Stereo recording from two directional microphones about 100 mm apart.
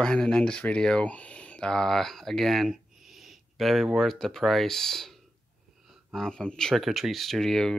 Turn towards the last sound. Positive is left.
turn(degrees=5)  # may be behind; listen again after turning